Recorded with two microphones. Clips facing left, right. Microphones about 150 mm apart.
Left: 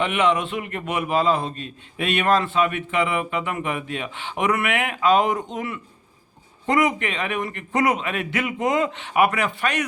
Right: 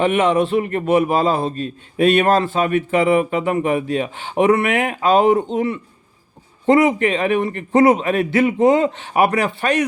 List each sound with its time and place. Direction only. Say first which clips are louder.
0.0 s a man's voice: right 5 dB; 40° right (ahead or behind)